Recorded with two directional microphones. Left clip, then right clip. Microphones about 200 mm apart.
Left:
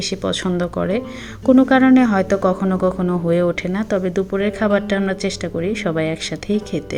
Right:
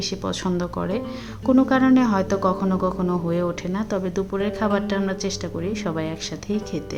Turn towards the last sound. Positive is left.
turn(degrees=20)  # may be behind; listen again after turning